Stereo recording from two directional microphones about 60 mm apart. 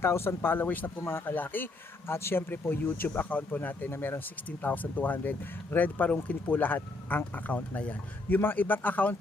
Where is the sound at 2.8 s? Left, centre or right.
Left.